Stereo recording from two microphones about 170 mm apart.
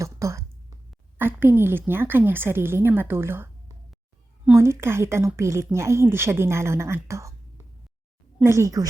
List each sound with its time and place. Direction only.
0.0 s a sound: 20° right (ahead or behind)
1.2 s a woman's voice: 15° right (ahead or behind)
4.5 s a woman's voice: 15° right (ahead or behind)
8.4 s speech: 20° right (ahead or behind)